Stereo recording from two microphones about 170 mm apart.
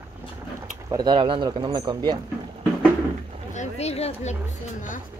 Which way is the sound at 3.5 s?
40° left (ahead or behind).